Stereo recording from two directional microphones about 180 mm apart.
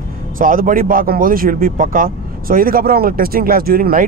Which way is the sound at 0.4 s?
50° right (ahead or behind).